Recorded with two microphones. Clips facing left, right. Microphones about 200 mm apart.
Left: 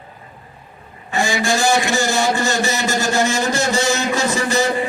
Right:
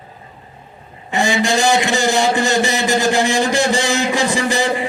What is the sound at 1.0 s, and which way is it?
A man's voice, 20° right (ahead or behind).